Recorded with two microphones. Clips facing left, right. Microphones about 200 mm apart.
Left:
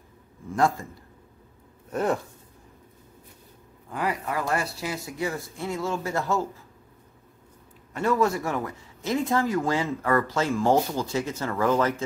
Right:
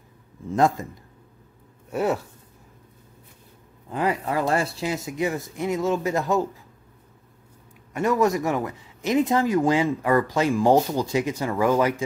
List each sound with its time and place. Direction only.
0.5 s speech: 20° right (ahead or behind)
1.9 s speech: 5° right (ahead or behind)
3.9 s speech: 25° right (ahead or behind)
7.9 s speech: 15° right (ahead or behind)